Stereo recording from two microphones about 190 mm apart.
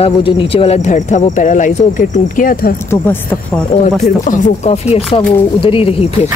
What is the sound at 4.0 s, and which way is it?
Speech, 35° left (ahead or behind).